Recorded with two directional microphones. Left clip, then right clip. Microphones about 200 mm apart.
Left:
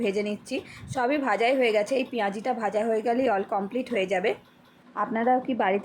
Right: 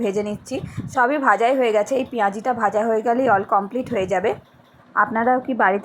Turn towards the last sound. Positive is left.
turn(degrees=-5)  # may be behind; listen again after turning